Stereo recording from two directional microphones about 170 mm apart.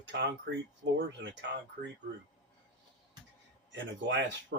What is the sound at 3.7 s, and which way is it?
Speech, 90° right.